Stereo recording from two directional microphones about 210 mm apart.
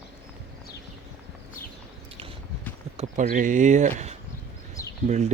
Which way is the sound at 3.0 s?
35° right (ahead or behind).